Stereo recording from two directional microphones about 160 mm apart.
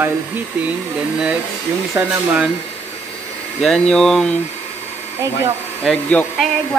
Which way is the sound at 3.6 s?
5° left (ahead or behind).